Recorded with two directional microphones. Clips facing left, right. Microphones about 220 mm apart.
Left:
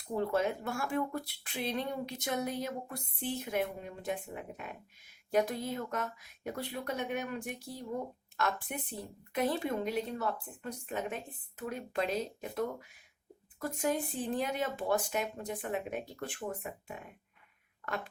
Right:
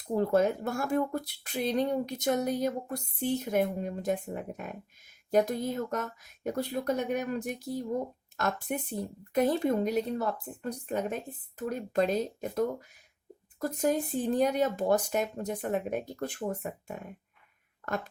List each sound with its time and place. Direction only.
0.2 s speech: 40° right (ahead or behind)